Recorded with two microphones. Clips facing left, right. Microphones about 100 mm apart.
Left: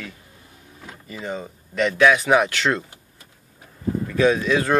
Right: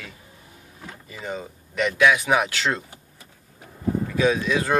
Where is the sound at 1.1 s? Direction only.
20° left (ahead or behind).